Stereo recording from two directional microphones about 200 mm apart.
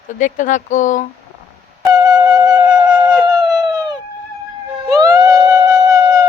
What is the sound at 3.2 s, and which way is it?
Howl, 20° right (ahead or behind).